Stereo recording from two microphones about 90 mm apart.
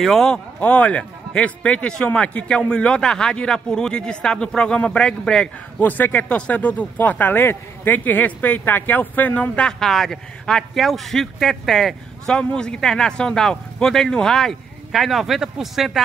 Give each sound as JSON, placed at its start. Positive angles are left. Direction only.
{"t": 0.0, "sound": "speech", "side_deg": 5}
{"t": 0.6, "sound": "speech", "side_deg": 15}
{"t": 5.9, "sound": "speech", "side_deg": 20}